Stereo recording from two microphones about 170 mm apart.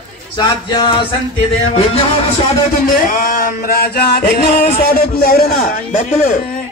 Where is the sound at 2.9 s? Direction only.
55° left (ahead or behind).